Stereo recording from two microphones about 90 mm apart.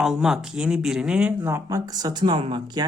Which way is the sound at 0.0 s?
5° right (ahead or behind).